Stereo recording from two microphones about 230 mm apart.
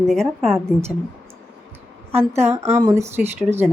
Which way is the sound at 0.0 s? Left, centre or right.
Centre.